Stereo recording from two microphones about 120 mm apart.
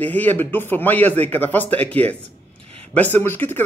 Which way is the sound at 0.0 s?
15° left (ahead or behind).